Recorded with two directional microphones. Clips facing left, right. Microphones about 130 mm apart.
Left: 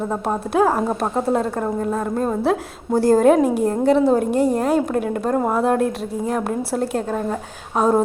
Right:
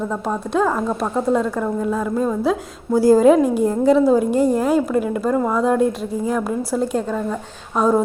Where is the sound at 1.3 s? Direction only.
35° left (ahead or behind).